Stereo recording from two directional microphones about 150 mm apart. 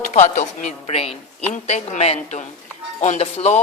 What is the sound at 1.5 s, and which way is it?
A woman's voice, 50° left (ahead or behind).